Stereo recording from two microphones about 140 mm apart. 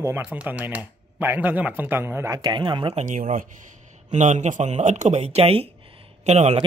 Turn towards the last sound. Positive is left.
turn(degrees=-50)  # may be behind; listen again after turning